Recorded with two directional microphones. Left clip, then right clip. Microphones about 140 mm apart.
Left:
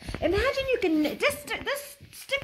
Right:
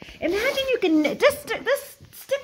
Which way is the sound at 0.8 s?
90° right.